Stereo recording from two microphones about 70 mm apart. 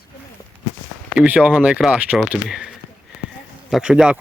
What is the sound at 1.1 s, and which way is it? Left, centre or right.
Speech, centre.